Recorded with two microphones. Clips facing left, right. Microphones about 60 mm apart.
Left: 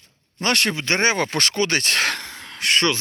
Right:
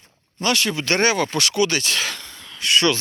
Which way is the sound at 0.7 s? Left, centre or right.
Left.